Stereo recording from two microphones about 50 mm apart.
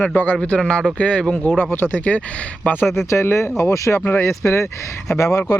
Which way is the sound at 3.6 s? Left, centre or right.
Left.